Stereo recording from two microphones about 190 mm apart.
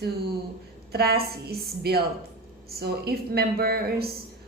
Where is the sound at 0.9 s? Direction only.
55° right (ahead or behind).